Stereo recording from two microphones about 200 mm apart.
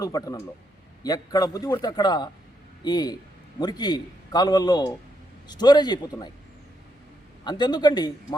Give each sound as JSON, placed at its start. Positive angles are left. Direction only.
{"t": 0.0, "sound": "a man's voice", "side_deg": 20}
{"t": 7.4, "sound": "a man's voice", "side_deg": 20}